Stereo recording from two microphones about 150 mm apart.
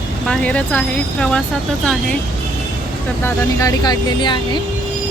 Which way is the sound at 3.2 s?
20° left (ahead or behind).